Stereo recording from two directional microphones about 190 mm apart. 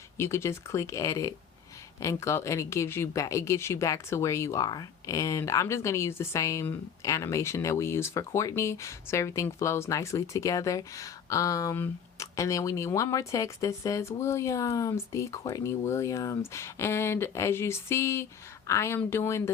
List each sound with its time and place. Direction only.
0.2 s speech: 15° left (ahead or behind)